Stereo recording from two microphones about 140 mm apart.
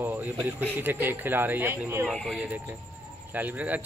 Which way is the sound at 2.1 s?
5° left (ahead or behind).